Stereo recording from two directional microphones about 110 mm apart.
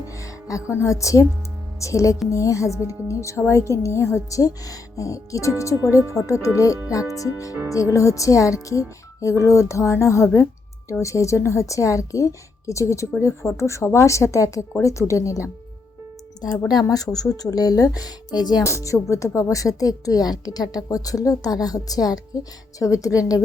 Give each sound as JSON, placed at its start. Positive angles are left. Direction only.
{"t": 0.2, "sound": "a woman's voice", "side_deg": 30}
{"t": 18.6, "sound": "speech", "side_deg": 30}